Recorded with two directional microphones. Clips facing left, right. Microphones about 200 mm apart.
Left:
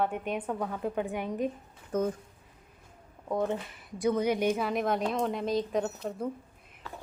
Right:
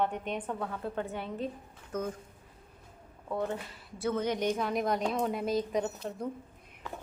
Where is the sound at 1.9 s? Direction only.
30° left (ahead or behind).